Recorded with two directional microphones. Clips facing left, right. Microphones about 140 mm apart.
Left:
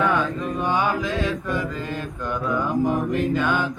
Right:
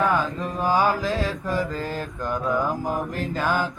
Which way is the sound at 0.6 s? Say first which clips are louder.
Right 2 dB; 35° right (ahead or behind).